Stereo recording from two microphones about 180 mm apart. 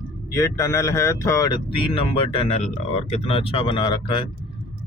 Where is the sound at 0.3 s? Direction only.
15° left (ahead or behind).